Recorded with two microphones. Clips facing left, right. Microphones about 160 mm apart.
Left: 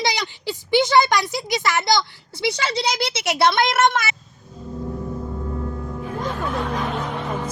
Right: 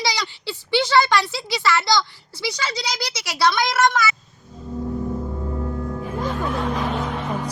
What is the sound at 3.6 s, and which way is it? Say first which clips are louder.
Speech: left 2 dB; 55° left (ahead or behind).